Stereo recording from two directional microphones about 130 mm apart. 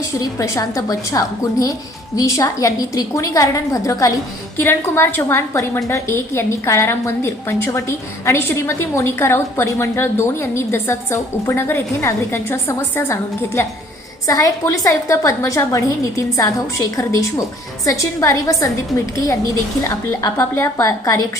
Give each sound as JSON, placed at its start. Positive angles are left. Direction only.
{"t": 0.1, "sound": "a woman's voice", "side_deg": 25}
{"t": 20.3, "sound": "a woman's voice", "side_deg": 20}